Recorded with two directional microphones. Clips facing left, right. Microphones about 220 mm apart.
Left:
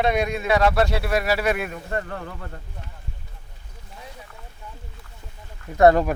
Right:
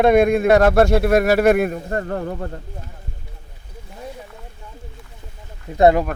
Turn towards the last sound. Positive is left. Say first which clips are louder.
# right 1 dB
turn(degrees=-20)  # may be behind; listen again after turning